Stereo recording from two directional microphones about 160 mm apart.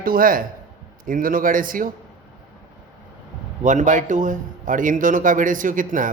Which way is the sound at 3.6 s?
50° right (ahead or behind).